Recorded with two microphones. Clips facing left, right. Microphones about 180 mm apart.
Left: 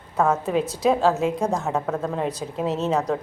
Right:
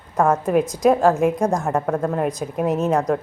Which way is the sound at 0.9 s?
10° right (ahead or behind).